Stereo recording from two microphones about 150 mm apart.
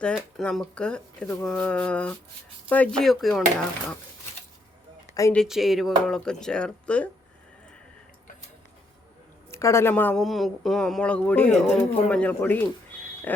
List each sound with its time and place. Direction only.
0.0 s speech: 5° left (ahead or behind)
5.3 s speech: centre (ahead or behind)
9.5 s speech: 20° left (ahead or behind)